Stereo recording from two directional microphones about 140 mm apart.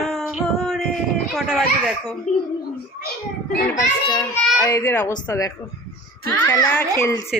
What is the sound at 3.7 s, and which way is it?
A child's voice, 20° left (ahead or behind).